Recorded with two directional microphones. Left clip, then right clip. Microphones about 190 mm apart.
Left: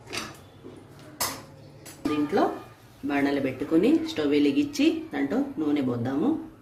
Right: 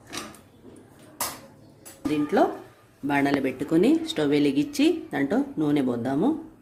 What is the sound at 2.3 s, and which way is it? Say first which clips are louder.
A woman's voice: right 5 dB; 55° right (ahead or behind).